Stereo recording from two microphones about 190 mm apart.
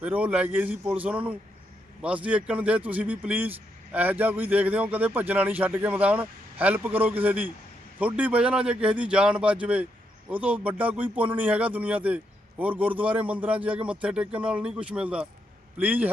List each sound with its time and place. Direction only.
0.0 s a man's voice: 5° right (ahead or behind)